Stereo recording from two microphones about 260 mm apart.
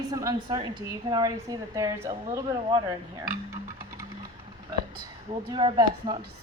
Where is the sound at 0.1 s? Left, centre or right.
Centre.